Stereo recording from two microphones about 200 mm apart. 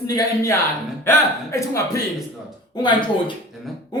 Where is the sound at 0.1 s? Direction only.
20° left (ahead or behind).